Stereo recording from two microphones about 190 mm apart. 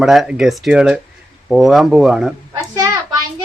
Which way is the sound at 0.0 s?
Centre (ahead or behind).